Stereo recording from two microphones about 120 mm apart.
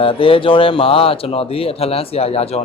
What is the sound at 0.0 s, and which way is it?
Speech, 50° left (ahead or behind).